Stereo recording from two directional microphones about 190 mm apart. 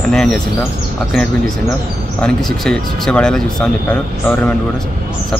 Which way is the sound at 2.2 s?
5° left (ahead or behind).